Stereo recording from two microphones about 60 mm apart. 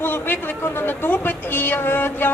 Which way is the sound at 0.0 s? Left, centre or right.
Left.